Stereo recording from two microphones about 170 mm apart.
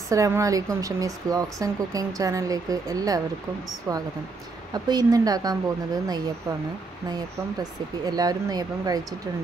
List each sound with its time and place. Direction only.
0.1 s speech: 20° right (ahead or behind)
4.7 s speech: 25° right (ahead or behind)